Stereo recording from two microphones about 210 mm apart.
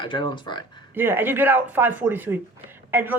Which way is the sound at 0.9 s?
10° right (ahead or behind).